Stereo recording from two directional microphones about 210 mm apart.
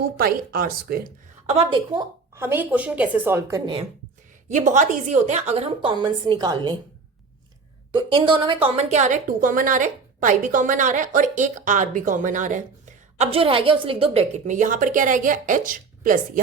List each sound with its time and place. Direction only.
0.2 s speech: 45° right (ahead or behind)
1.5 s a woman's voice: 25° right (ahead or behind)
2.3 s a woman's voice: 10° right (ahead or behind)
4.4 s a woman's voice: 35° right (ahead or behind)
7.9 s a woman's voice: 25° right (ahead or behind)
13.1 s a woman's voice: 25° right (ahead or behind)